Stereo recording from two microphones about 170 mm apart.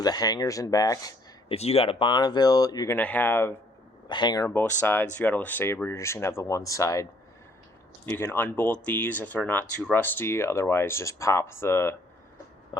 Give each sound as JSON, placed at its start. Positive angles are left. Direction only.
{"t": 0.0, "sound": "speech", "side_deg": 25}
{"t": 1.5, "sound": "speech", "side_deg": 35}
{"t": 2.9, "sound": "speech", "side_deg": 10}
{"t": 4.1, "sound": "speech", "side_deg": 25}